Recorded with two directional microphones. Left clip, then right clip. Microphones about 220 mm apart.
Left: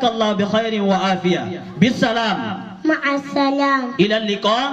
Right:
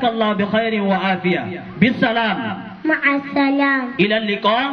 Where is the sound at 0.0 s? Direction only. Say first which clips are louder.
Even; 70° left (ahead or behind).